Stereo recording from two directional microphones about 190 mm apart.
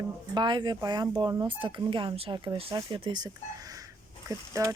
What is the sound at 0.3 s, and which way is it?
Speech, 25° right (ahead or behind).